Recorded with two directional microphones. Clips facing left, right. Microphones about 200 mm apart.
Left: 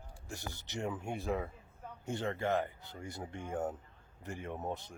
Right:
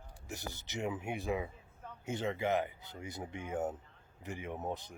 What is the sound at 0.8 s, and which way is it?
Speech, 5° right (ahead or behind).